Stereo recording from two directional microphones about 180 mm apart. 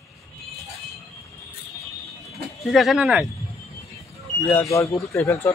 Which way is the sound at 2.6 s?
Centre (ahead or behind).